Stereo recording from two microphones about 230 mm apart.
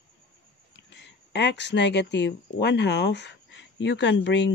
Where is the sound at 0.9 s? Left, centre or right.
Left.